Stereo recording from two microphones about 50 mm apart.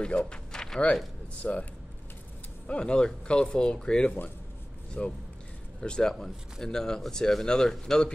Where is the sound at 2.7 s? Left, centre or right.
Centre.